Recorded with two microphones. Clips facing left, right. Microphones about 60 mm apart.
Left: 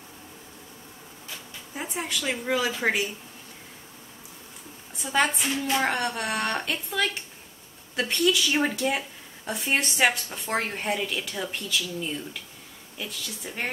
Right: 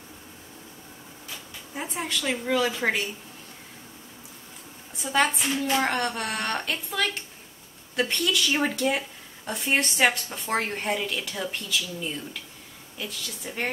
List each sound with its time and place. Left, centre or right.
1.8 s speech: centre
4.9 s speech: centre